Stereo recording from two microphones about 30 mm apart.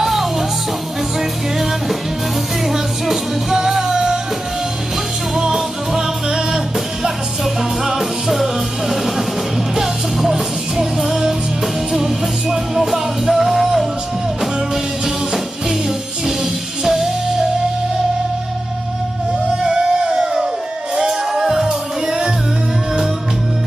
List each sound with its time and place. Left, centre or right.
0.0 s music: centre
2.6 s music: centre
8.0 s music: centre
11.0 s music: centre
15.0 s music: centre
16.8 s music: centre
19.6 s crowd: right
20.9 s music: centre